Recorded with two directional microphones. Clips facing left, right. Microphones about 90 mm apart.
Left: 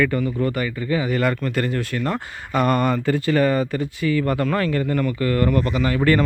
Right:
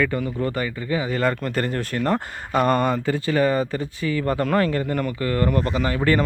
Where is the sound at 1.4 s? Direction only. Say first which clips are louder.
Left 1 dB; 35° right (ahead or behind).